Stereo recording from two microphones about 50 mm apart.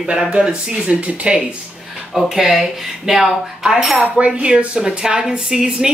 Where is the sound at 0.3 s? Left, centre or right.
Centre.